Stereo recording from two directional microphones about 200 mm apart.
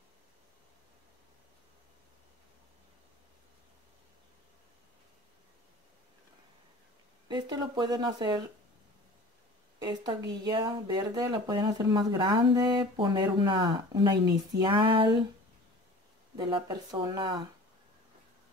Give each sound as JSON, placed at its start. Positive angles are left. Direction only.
{"t": 7.2, "sound": "speech", "side_deg": -20}
{"t": 9.8, "sound": "speech", "side_deg": -20}
{"t": 16.3, "sound": "speech", "side_deg": -20}